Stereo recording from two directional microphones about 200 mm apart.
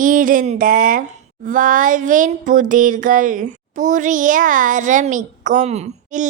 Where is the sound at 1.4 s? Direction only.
40° right (ahead or behind).